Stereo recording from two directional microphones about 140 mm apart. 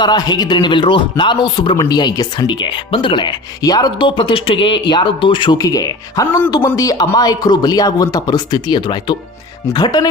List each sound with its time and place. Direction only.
0.0 s speech: 30° left (ahead or behind)